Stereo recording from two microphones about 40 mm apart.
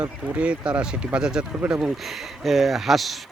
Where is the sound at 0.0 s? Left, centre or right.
Right.